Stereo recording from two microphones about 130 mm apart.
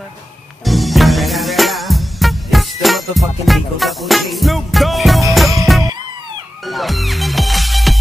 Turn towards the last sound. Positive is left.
turn(degrees=0)  # may be behind; listen again after turning